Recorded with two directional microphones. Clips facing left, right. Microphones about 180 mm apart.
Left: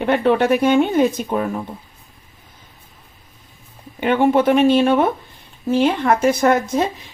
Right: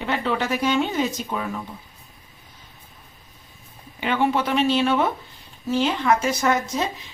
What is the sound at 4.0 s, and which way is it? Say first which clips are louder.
Speech: left 7 dB; 50° left (ahead or behind).